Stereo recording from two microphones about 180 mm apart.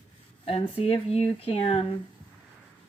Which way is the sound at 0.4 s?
30° left (ahead or behind).